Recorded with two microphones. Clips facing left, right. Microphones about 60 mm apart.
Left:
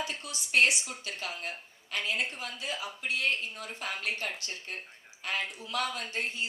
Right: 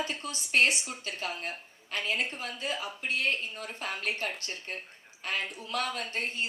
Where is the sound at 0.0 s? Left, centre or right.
Right.